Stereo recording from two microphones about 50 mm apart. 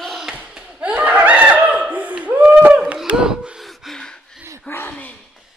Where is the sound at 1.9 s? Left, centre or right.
Right.